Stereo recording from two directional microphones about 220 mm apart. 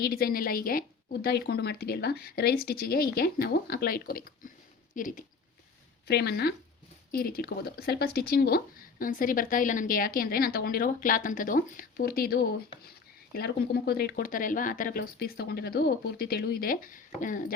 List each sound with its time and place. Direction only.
0.0 s speech: 45° left (ahead or behind)
6.1 s speech: 50° left (ahead or behind)